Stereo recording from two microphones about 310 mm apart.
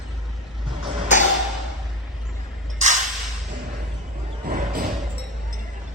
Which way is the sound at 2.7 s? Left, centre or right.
Right.